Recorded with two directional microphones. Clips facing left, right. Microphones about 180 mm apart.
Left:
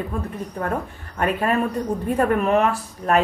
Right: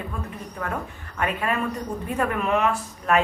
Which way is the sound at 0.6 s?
40° left (ahead or behind).